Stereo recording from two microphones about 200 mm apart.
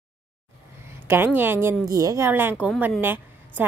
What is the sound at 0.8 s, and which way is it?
A woman's voice, 10° right (ahead or behind).